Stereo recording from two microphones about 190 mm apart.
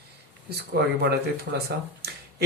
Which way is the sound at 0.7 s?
60° right (ahead or behind).